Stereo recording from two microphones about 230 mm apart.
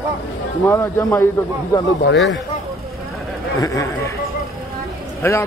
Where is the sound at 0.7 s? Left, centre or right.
Centre.